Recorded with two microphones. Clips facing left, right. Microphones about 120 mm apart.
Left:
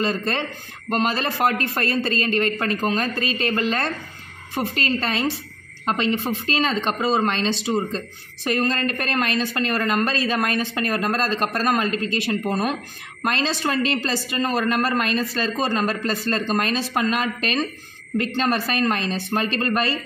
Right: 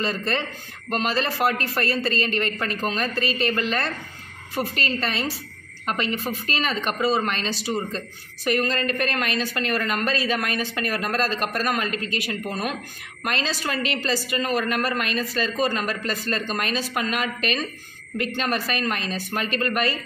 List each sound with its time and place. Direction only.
0.0 s a woman's voice: 20° left (ahead or behind)